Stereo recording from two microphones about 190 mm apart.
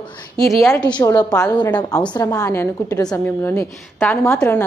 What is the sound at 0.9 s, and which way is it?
A woman's voice, 20° left (ahead or behind).